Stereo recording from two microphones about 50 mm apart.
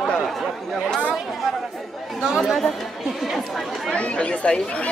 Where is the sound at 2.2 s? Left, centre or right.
Centre.